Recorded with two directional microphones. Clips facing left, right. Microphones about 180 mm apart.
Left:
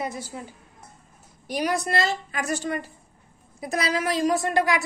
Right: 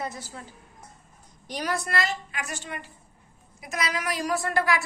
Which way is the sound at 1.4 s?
10° left (ahead or behind).